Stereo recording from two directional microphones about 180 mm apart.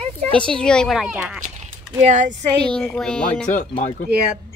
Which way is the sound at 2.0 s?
45° right (ahead or behind).